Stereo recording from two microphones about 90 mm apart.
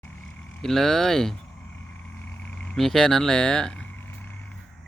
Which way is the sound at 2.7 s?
5° left (ahead or behind).